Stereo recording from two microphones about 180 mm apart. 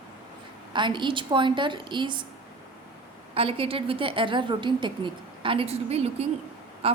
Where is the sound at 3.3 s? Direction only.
30° right (ahead or behind).